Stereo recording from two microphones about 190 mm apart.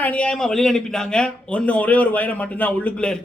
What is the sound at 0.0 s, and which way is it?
A man's voice, 5° left (ahead or behind).